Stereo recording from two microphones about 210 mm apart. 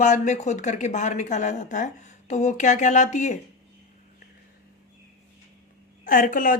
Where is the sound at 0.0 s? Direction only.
35° left (ahead or behind).